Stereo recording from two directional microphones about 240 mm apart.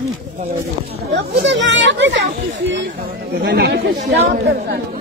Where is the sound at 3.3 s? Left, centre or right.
Right.